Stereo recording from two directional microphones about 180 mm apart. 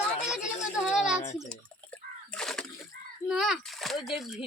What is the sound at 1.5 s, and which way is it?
Water, 5° left (ahead or behind).